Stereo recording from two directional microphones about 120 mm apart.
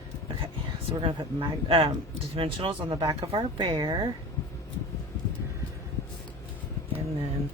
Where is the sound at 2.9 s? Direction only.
30° right (ahead or behind).